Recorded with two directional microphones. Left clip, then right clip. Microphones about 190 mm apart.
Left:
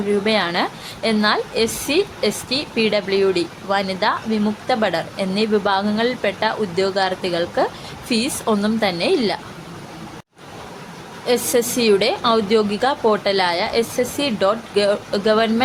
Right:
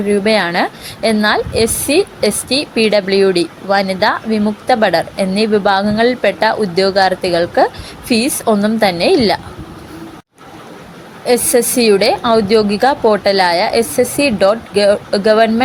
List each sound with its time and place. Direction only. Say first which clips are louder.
0.1 s a woman's voice: right 6 dB; 15° right (ahead or behind)
11.3 s a woman's voice: right 6 dB; 15° right (ahead or behind)